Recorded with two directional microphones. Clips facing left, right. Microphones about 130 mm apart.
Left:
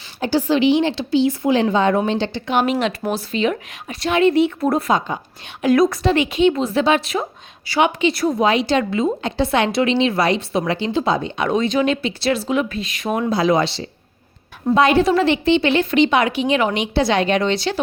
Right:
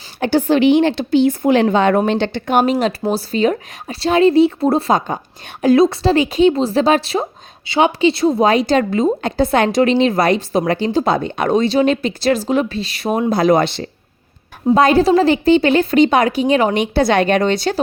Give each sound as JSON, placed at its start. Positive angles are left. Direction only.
{"t": 0.2, "sound": "a woman's voice", "side_deg": -55}
{"t": 4.9, "sound": "a woman's voice", "side_deg": -45}
{"t": 5.6, "sound": "a woman's voice", "side_deg": -25}
{"t": 8.4, "sound": "a woman's voice", "side_deg": -45}
{"t": 13.3, "sound": "a woman's voice", "side_deg": -50}
{"t": 14.8, "sound": "a woman's voice", "side_deg": -40}